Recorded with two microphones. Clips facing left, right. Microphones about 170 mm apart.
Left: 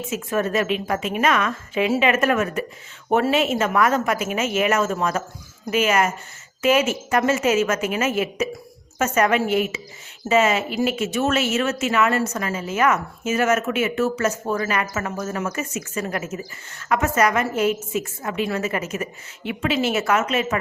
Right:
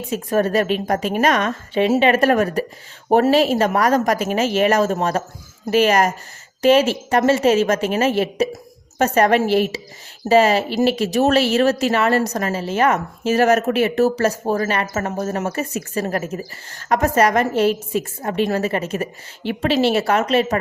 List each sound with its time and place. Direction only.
0.0 s speech: 35° right (ahead or behind)